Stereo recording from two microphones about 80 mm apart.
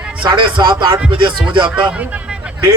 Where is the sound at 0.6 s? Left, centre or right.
Right.